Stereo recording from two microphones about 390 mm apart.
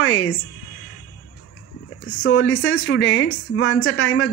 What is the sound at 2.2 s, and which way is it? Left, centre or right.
A woman's voice, left.